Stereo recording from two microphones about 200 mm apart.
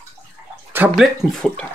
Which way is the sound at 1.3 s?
5° left (ahead or behind).